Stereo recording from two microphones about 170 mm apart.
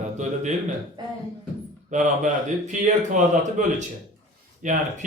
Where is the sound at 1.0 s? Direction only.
25° right (ahead or behind).